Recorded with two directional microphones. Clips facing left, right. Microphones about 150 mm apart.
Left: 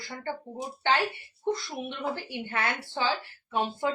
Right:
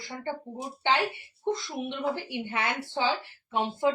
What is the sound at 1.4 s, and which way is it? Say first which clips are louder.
Speech: even; 20° right (ahead or behind).